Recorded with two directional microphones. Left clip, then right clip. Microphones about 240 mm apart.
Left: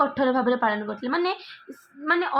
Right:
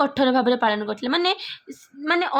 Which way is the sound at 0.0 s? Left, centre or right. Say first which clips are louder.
Right 2 dB; right.